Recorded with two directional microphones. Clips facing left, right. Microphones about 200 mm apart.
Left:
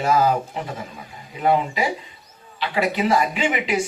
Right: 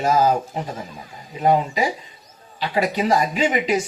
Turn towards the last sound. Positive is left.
turn(degrees=-40)  # may be behind; listen again after turning